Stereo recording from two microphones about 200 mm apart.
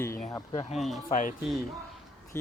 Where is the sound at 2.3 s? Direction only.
10° left (ahead or behind).